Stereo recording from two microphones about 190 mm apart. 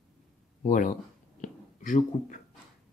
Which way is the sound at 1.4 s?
40° left (ahead or behind).